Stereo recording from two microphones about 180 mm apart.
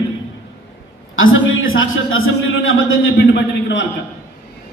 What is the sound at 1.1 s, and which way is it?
A man's voice, 90° left.